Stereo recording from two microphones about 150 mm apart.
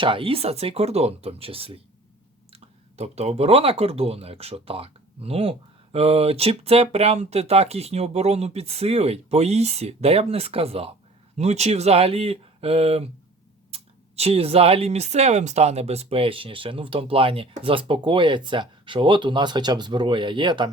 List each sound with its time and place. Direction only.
0.0 s speech: 35° right (ahead or behind)